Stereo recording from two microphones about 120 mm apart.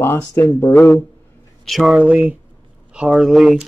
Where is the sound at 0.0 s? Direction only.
20° left (ahead or behind).